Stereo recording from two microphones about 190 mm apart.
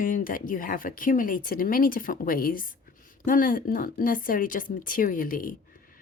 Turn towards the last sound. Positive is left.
turn(degrees=50)  # may be behind; listen again after turning